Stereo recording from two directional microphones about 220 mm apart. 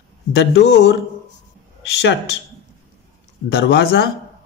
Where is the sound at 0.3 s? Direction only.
50° left (ahead or behind).